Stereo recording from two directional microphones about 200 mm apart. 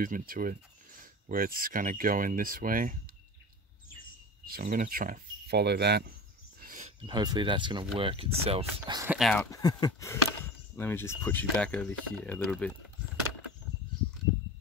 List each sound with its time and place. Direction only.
0.0 s speech: 45° right (ahead or behind)
4.5 s speech: 45° right (ahead or behind)
6.6 s a sound: 40° right (ahead or behind)
7.1 s speech: 20° right (ahead or behind)
9.0 s speech: 5° right (ahead or behind)
9.5 s speech: 20° left (ahead or behind)